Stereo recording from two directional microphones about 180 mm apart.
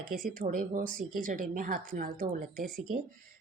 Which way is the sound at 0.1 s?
50° right (ahead or behind).